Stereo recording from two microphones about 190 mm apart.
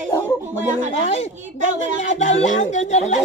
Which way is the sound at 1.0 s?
35° left (ahead or behind).